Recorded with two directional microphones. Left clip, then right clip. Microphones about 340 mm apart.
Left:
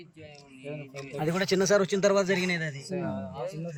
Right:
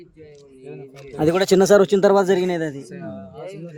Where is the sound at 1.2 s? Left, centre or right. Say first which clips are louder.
Right 11 dB; right.